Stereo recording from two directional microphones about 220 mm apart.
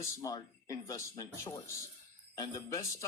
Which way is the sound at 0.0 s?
15° left (ahead or behind).